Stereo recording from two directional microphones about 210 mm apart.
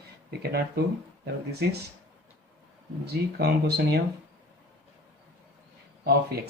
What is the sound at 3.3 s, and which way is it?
Speech, 50° right (ahead or behind).